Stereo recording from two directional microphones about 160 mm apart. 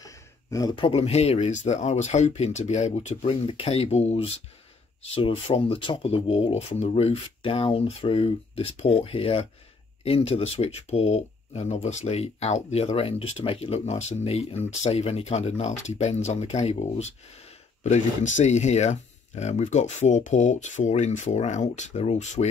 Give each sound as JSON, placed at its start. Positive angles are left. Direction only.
{"t": 0.0, "sound": "speech", "side_deg": 20}